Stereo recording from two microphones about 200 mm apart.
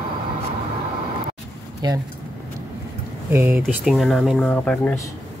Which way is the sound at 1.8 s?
20° right (ahead or behind).